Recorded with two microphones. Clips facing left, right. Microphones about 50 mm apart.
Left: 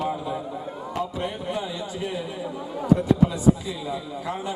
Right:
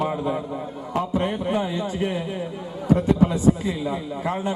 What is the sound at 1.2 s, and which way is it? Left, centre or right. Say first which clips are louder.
Speech: right 5 dB; right.